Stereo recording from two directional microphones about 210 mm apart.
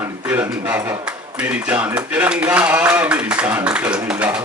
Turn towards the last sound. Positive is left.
turn(degrees=-5)  # may be behind; listen again after turning